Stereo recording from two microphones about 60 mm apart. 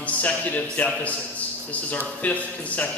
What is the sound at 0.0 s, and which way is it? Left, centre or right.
A man's voice, left.